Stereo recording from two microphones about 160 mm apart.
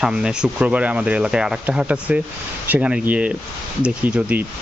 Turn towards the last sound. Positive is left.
turn(degrees=-10)  # may be behind; listen again after turning